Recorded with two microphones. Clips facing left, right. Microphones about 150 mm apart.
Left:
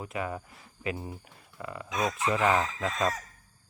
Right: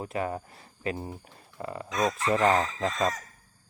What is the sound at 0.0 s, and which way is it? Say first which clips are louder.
Speech: right 3 dB; 35° right (ahead or behind).